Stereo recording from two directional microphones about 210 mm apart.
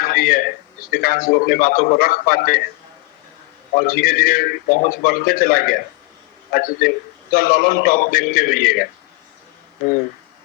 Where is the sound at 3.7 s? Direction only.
45° left (ahead or behind).